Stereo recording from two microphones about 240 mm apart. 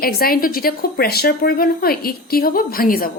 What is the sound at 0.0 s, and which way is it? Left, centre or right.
A woman's voice, left.